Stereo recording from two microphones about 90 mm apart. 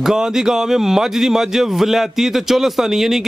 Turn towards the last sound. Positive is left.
turn(degrees=-5)  # may be behind; listen again after turning